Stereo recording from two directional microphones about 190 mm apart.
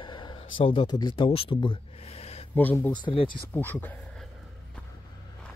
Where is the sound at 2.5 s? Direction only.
10° left (ahead or behind).